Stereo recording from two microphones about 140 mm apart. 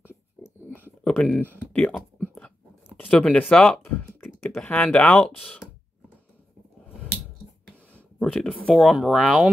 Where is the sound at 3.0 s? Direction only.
10° left (ahead or behind).